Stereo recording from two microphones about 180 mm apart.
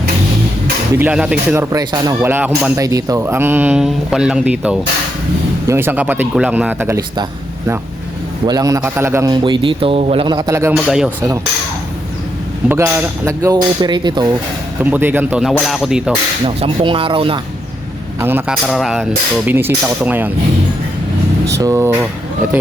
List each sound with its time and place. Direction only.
0.9 s speech: 5° right (ahead or behind)
1.7 s a man's voice: 20° right (ahead or behind)
2.2 s speech: 10° right (ahead or behind)
8.4 s a man's voice: 20° right (ahead or behind)
10.8 s speech: 5° right (ahead or behind)
12.6 s speech: 10° right (ahead or behind)
14.8 s speech: 10° right (ahead or behind)
16.5 s a man's voice: 30° right (ahead or behind)
18.2 s speech: 10° right (ahead or behind)
19.5 s speech: 10° right (ahead or behind)
21.5 s speech: 15° right (ahead or behind)